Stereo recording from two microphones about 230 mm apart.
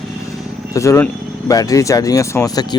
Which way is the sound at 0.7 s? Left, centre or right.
Centre.